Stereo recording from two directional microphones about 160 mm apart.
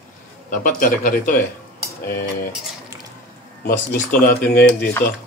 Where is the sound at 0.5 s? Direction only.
55° left (ahead or behind).